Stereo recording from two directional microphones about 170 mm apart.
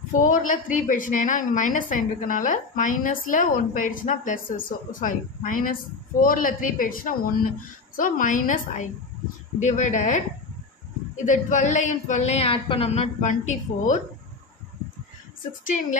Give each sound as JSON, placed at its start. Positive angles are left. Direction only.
{"t": 0.1, "sound": "a woman's voice", "side_deg": 50}
{"t": 11.2, "sound": "a woman's voice", "side_deg": 45}
{"t": 15.6, "sound": "a woman's voice", "side_deg": 50}